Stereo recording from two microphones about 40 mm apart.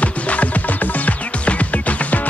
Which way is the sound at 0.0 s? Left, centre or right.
Left.